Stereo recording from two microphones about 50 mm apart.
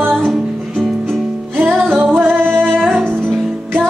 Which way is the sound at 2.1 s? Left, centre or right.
Right.